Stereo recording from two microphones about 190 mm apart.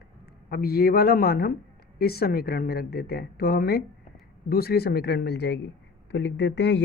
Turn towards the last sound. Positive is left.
turn(degrees=65)  # may be behind; listen again after turning